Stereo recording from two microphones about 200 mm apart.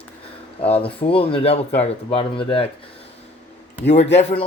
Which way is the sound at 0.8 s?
30° left (ahead or behind).